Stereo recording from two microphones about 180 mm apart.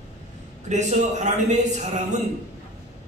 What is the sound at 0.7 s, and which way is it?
A man's voice, 40° right (ahead or behind).